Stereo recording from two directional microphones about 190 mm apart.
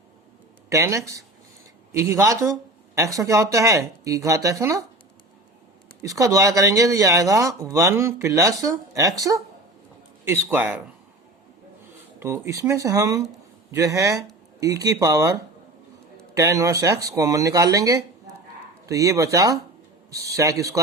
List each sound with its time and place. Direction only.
0.7 s speech: 15° right (ahead or behind)
6.0 s speech: 15° right (ahead or behind)
12.2 s speech: 15° right (ahead or behind)